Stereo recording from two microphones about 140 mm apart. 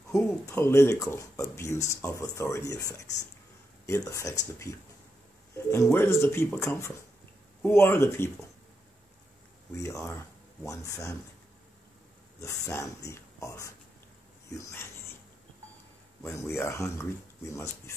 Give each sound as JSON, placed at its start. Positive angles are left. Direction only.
{"t": 0.1, "sound": "speech", "side_deg": 20}
{"t": 5.9, "sound": "speech", "side_deg": 20}
{"t": 9.8, "sound": "speech", "side_deg": 20}
{"t": 12.4, "sound": "speech", "side_deg": 20}
{"t": 16.2, "sound": "speech", "side_deg": 20}